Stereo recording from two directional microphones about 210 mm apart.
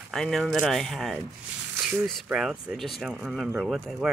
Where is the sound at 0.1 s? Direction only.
Centre (ahead or behind).